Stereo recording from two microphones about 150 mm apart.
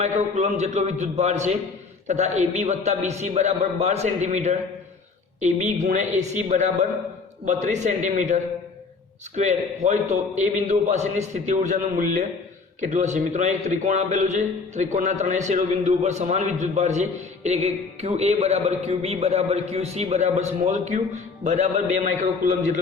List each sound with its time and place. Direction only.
0.0 s a man's voice: 50° right (ahead or behind)